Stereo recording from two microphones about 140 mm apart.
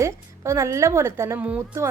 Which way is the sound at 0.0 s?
20° right (ahead or behind).